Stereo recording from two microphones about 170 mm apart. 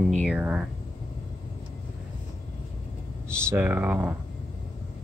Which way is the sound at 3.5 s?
10° right (ahead or behind).